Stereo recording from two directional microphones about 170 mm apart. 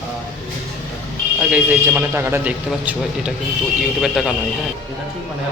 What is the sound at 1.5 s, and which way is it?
A man's voice, 10° right (ahead or behind).